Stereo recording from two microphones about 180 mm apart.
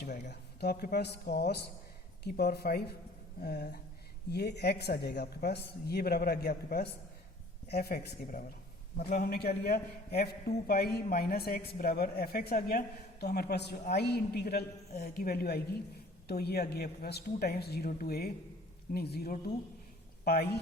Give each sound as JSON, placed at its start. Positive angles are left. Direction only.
{"t": 0.0, "sound": "a man's voice", "side_deg": 65}